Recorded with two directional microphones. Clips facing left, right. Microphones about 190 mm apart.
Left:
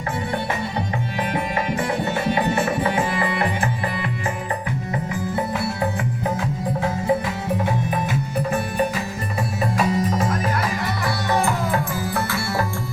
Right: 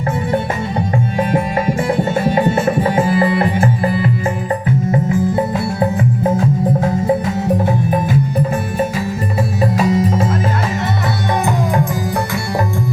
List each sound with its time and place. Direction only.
2.9 s music: 40° right (ahead or behind)
9.7 s music: 25° right (ahead or behind)
11.4 s music: 15° right (ahead or behind)